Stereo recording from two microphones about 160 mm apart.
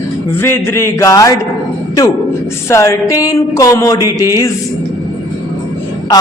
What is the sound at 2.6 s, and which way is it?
A man's voice, 20° left (ahead or behind).